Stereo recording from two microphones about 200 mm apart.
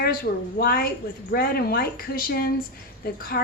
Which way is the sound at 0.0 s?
45° left (ahead or behind).